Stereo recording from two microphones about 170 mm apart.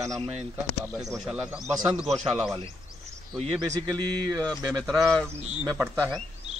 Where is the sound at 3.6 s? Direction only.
20° right (ahead or behind).